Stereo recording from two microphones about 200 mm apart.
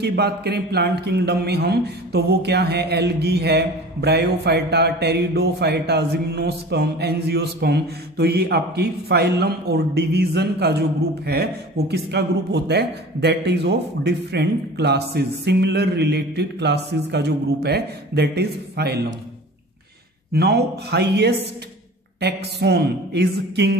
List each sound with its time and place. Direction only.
0.0 s speech: 55° right (ahead or behind)
20.3 s speech: 55° right (ahead or behind)